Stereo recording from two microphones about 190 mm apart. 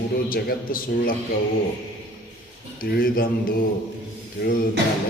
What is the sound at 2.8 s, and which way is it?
Speech, 50° left (ahead or behind).